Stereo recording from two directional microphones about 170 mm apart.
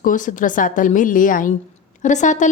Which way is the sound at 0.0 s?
50° left (ahead or behind).